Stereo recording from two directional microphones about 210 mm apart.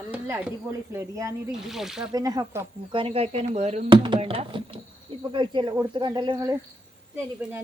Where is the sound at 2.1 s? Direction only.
20° right (ahead or behind).